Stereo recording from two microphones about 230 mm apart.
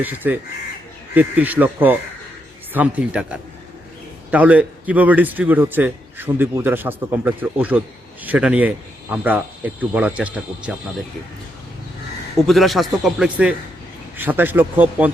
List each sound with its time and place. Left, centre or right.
0.0 s a man's voice: centre
12.4 s a man's voice: centre